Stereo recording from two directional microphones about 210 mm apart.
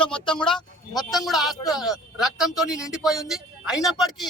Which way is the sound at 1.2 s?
Centre (ahead or behind).